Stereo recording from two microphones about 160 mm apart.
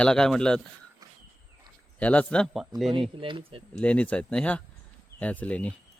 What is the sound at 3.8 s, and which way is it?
Speech, 10° left (ahead or behind).